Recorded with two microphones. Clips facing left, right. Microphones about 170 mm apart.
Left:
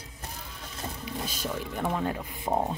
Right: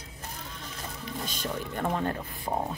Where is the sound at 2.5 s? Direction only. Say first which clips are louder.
Left 3 dB; 15° left (ahead or behind).